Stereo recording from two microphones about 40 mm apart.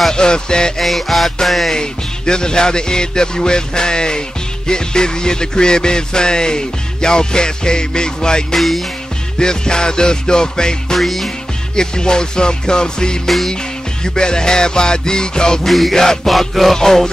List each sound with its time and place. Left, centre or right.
0.1 s music: centre
0.7 s music: centre
1.8 s music: centre
8.5 s music: centre
9.4 s music: centre
11.0 s music: centre
11.7 s music: centre
15.6 s music: centre
16.7 s music: centre